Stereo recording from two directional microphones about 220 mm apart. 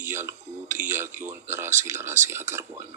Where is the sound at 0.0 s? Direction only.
10° right (ahead or behind).